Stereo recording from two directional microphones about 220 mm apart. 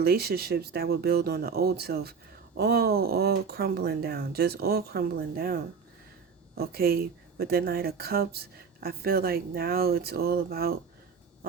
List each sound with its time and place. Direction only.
0.0 s speech: 45° right (ahead or behind)